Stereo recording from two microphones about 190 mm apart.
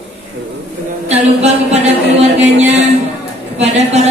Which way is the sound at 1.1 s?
35° right (ahead or behind).